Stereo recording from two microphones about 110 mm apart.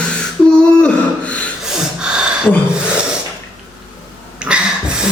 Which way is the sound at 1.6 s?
5° right (ahead or behind).